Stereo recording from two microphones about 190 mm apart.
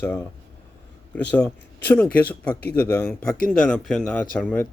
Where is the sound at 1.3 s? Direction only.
10° left (ahead or behind).